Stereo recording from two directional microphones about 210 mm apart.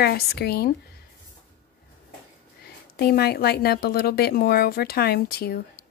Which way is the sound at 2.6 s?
50° left (ahead or behind).